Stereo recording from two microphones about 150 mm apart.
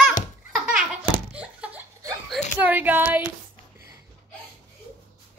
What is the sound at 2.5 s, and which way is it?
Speech, 10° right (ahead or behind).